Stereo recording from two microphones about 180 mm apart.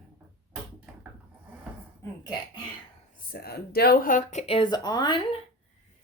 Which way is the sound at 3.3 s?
55° left (ahead or behind).